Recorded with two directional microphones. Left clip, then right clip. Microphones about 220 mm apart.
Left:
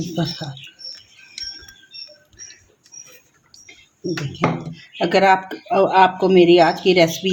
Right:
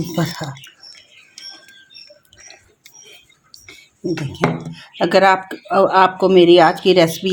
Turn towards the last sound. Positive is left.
turn(degrees=-30)  # may be behind; listen again after turning